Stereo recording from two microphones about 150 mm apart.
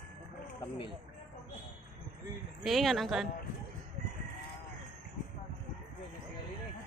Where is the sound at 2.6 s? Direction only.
Centre (ahead or behind).